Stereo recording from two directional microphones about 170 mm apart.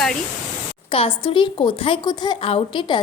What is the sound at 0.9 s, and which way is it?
A woman's voice, 30° left (ahead or behind).